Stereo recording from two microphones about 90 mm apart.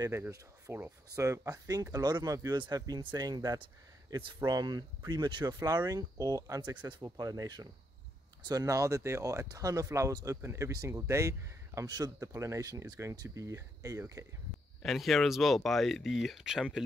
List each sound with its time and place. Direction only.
0.7 s speech: 25° right (ahead or behind)
1.2 s speech: 40° right (ahead or behind)
14.8 s speech: centre (ahead or behind)